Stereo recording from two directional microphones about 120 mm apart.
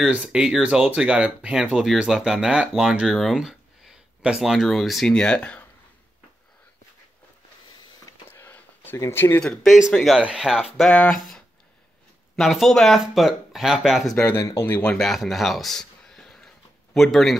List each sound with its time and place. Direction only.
0.0 s speech: 5° right (ahead or behind); by 5.7 s 10° left (ahead or behind)
8.0 s a sound: 20° left (ahead or behind)
9.4 s speech: centre (ahead or behind)
14.1 s speech: 15° left (ahead or behind)
14.8 s speech: 5° left (ahead or behind)